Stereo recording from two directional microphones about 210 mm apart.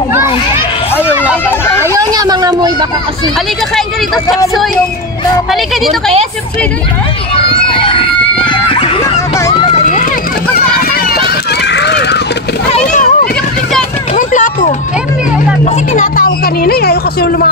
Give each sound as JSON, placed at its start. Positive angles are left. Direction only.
{"t": 2.0, "sound": "a sound", "side_deg": -20}
{"t": 5.5, "sound": "a woman's voice", "side_deg": 0}
{"t": 7.3, "sound": "screaming", "side_deg": 25}
{"t": 9.5, "sound": "run", "side_deg": 25}
{"t": 10.5, "sound": "run", "side_deg": 45}
{"t": 12.7, "sound": "a sound", "side_deg": 35}
{"t": 15.6, "sound": "speech", "side_deg": 35}